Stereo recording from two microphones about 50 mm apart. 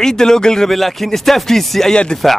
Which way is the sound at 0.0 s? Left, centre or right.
Centre.